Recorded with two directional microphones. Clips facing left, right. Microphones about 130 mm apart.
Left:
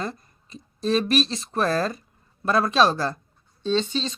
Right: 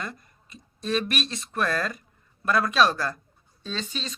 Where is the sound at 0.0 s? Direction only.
30° left (ahead or behind).